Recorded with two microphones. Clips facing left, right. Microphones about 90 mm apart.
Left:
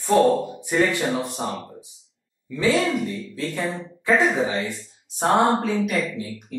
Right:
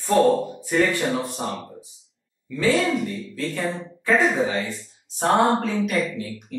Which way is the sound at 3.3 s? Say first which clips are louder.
Right 1 dB; 20° left (ahead or behind).